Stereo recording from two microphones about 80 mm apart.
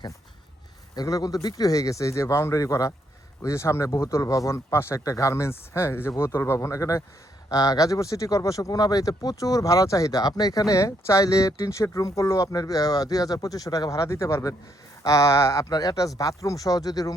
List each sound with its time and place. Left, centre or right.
0.9 s speech: left
14.1 s speech: left
15.7 s speech: left